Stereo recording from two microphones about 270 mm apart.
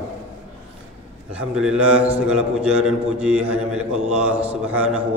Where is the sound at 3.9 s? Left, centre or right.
Right.